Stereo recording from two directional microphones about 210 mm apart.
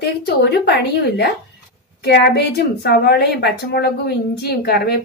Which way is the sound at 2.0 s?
50° left (ahead or behind).